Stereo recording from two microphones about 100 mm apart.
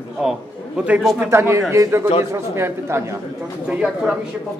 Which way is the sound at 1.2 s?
25° right (ahead or behind).